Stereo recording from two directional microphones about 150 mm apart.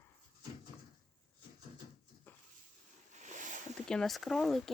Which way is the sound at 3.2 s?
55° right (ahead or behind).